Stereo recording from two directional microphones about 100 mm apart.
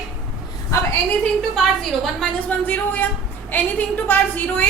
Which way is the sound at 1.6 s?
5° left (ahead or behind).